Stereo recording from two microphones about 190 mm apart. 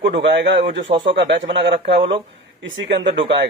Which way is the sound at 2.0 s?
30° right (ahead or behind).